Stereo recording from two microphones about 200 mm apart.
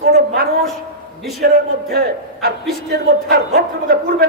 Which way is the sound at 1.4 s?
50° right (ahead or behind).